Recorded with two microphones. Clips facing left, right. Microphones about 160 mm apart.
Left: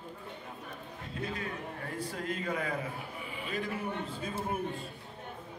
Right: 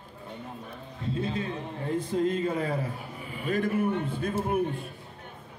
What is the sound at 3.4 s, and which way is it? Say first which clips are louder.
Speech: right 9 dB; 50° right (ahead or behind).